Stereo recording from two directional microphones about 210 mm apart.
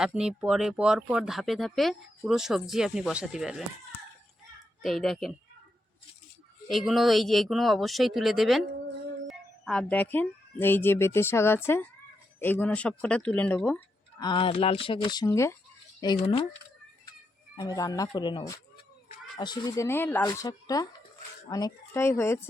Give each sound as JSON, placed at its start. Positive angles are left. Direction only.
{"t": 0.0, "sound": "speech", "side_deg": -5}
{"t": 4.8, "sound": "speech", "side_deg": 0}
{"t": 6.7, "sound": "speech", "side_deg": 0}
{"t": 14.2, "sound": "speech", "side_deg": 25}
{"t": 16.0, "sound": "speech", "side_deg": 25}
{"t": 17.6, "sound": "speech", "side_deg": 15}